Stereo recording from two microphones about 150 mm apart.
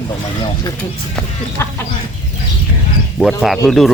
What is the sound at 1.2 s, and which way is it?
Speech, 15° left (ahead or behind).